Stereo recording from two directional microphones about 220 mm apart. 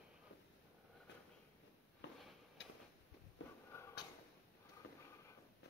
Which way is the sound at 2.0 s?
55° left (ahead or behind).